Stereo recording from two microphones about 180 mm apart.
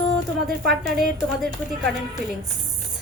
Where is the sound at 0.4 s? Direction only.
Centre (ahead or behind).